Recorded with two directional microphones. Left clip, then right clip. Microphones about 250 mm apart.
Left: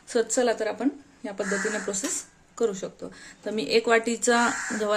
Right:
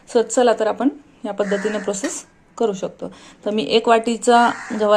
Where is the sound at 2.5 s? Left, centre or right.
Centre.